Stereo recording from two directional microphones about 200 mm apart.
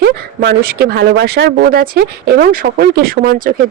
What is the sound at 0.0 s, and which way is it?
Speech, 55° right (ahead or behind).